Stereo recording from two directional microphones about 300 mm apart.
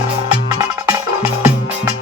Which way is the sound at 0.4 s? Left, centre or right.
Centre.